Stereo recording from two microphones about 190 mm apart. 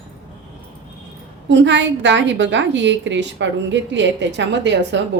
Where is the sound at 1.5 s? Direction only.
70° right (ahead or behind).